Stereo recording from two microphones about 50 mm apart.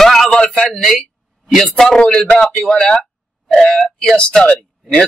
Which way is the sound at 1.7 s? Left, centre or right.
Centre.